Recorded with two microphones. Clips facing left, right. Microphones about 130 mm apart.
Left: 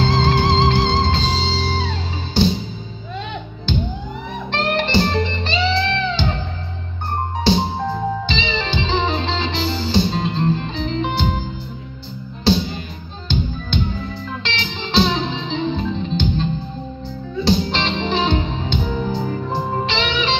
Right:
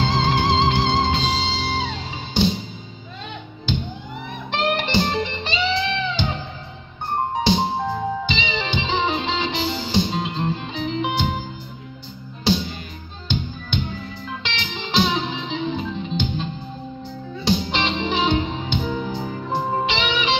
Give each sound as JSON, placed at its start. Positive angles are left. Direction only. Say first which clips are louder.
{"t": 0.0, "sound": "music", "louder": "left 3 dB", "side_deg": -15}
{"t": 4.5, "sound": "music", "louder": "left 2 dB", "side_deg": -15}
{"t": 7.4, "sound": "music", "louder": "left 4 dB", "side_deg": -15}
{"t": 14.4, "sound": "music", "louder": "left 3 dB", "side_deg": -15}
{"t": 17.5, "sound": "music", "louder": "left 2 dB", "side_deg": -10}